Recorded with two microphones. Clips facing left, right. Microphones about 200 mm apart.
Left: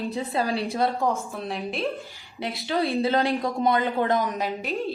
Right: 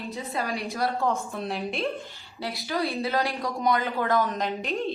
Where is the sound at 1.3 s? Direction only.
Centre (ahead or behind).